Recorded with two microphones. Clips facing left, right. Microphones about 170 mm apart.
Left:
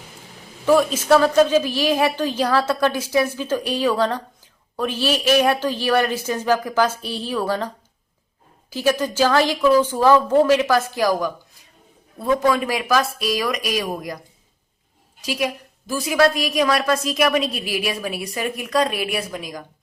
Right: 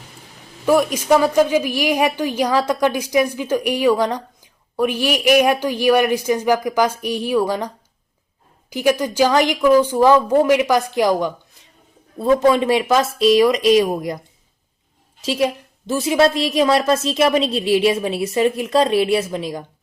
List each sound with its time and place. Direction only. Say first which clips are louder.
0.6 s a woman's voice: right 1 dB; 10° right (ahead or behind)
8.7 s a woman's voice: right 2 dB; 15° right (ahead or behind)
15.2 s a woman's voice: right 5 dB; 25° right (ahead or behind)